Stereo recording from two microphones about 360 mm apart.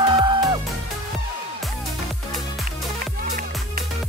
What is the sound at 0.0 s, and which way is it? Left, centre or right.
Music, centre.